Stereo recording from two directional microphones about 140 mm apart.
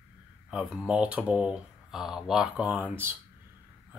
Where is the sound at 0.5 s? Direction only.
5° right (ahead or behind).